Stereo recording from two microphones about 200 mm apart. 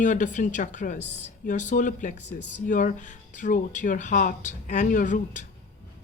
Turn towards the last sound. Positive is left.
turn(degrees=40)  # may be behind; listen again after turning